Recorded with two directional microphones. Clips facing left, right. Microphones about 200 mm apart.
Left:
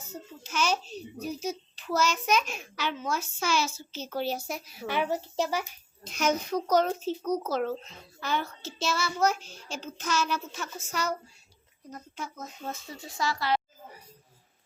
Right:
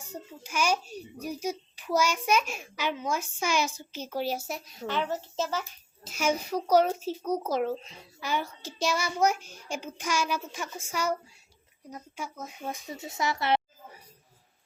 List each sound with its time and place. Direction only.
0.0 s a child's voice: 15° right (ahead or behind); by 5.6 s 15° left (ahead or behind)
6.1 s a child's voice: 10° right (ahead or behind); by 13.6 s 25° right (ahead or behind)